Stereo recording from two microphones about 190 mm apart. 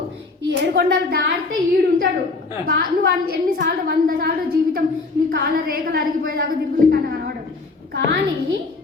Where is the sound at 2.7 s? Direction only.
50° right (ahead or behind).